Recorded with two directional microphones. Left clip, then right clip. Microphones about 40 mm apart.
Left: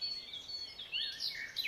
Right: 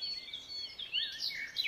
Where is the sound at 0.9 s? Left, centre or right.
Right.